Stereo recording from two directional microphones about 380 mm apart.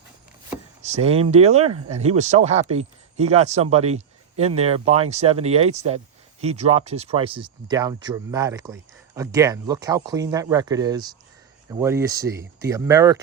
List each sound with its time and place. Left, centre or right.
0.8 s speech: centre